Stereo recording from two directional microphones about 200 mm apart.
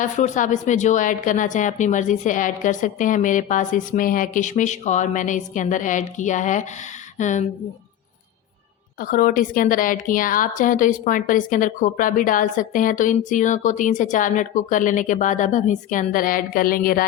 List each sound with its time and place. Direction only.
0.0 s a woman's voice: 40° left (ahead or behind)
9.0 s a woman's voice: 45° left (ahead or behind)